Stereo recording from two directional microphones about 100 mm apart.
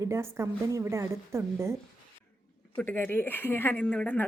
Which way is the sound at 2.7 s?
20° left (ahead or behind).